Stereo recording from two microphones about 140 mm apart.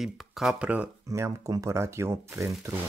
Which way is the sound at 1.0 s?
20° right (ahead or behind).